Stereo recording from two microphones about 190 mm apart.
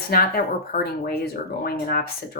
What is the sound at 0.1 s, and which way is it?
Speech, 50° left (ahead or behind).